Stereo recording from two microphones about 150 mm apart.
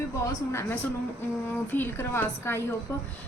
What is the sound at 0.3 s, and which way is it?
A woman's voice, 15° left (ahead or behind).